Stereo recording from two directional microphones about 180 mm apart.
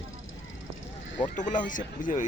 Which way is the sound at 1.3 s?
45° left (ahead or behind).